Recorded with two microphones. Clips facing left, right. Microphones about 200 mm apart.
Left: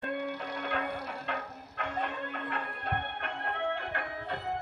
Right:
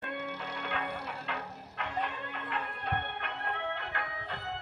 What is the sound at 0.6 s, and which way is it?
Music, 45° left (ahead or behind).